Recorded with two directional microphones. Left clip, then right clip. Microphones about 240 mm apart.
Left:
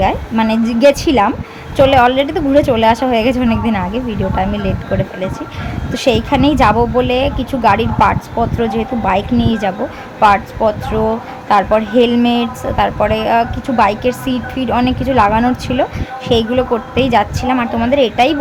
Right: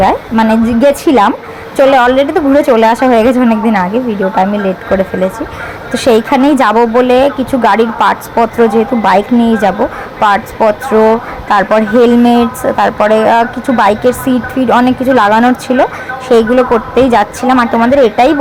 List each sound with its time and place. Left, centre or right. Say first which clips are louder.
0.0 s a woman's voice: right 5 dB; centre
6.1 s a woman's voice: right 5 dB; centre
16.9 s a woman's voice: right 5 dB; centre